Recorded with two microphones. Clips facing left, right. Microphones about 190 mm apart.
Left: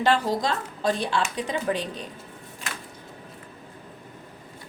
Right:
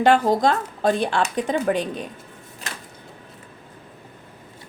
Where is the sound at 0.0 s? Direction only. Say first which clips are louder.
Right 6 dB; 50° right (ahead or behind).